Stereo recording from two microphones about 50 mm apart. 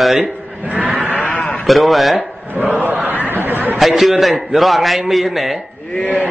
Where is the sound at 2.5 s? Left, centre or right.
Right.